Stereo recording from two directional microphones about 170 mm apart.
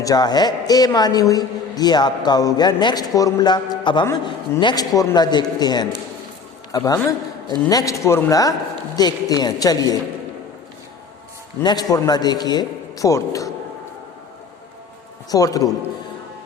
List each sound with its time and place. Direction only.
0.0 s a man's voice: 20° left (ahead or behind)
11.6 s a man's voice: 25° left (ahead or behind)
15.3 s a man's voice: 20° left (ahead or behind)